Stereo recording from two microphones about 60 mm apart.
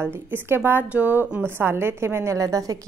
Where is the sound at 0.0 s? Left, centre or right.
Right.